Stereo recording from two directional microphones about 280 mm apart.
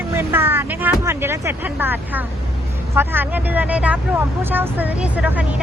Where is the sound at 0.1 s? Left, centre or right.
Centre.